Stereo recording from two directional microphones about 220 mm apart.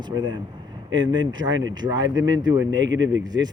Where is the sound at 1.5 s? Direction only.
55° right (ahead or behind).